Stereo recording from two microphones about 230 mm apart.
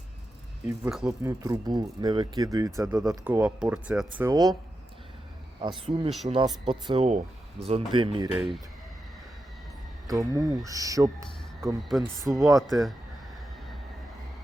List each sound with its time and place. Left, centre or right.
1.0 s speech: centre
5.6 s speech: right
8.4 s speech: centre
10.1 s speech: centre
11.9 s speech: centre
12.3 s speech: centre
12.6 s speech: centre